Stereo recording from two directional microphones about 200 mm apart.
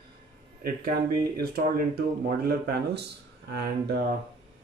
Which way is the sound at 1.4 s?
50° right (ahead or behind).